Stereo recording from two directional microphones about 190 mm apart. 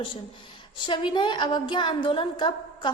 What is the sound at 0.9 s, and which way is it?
A woman's voice, 25° left (ahead or behind).